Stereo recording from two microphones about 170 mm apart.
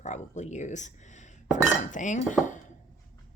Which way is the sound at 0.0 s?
45° left (ahead or behind).